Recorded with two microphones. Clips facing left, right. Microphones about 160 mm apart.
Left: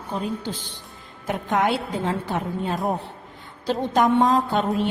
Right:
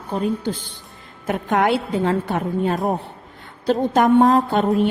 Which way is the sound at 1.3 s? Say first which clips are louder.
Right 4 dB; 60° right (ahead or behind).